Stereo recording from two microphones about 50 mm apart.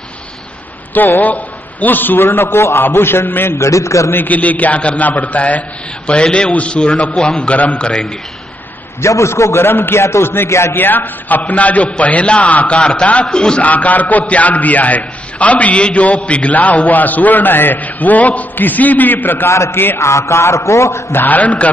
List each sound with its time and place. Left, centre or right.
1.2 s a man's voice: left
2.2 s a man's voice: left
3.4 s a man's voice: left
4.1 s a man's voice: left
7.2 s a man's voice: centre
7.4 s a man's voice: left
7.8 s a man's voice: centre
9.0 s a man's voice: left
10.7 s a man's voice: left; by 13.7 s centre
13.7 s a man's voice: left
20.0 s a sound: left
21.1 s a man's voice: left
21.4 s a man's voice: left